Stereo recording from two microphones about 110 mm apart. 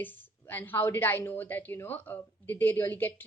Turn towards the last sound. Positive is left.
turn(degrees=20)  # may be behind; listen again after turning